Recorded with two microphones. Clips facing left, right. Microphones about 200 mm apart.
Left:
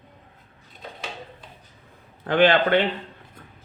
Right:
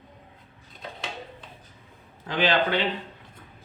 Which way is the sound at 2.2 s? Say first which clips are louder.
Left 6 dB; 55° left (ahead or behind).